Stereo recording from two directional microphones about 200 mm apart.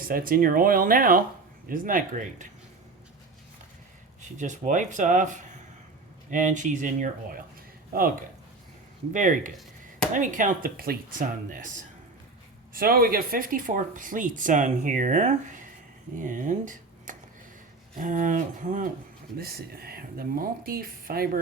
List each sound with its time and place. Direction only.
0.0 s speech: 45° right (ahead or behind)
4.2 s speech: 40° right (ahead or behind)
9.1 s speech: 40° right (ahead or behind)
12.7 s speech: 50° right (ahead or behind)